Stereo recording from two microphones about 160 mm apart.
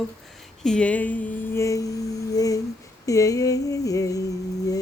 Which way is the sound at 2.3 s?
20° left (ahead or behind).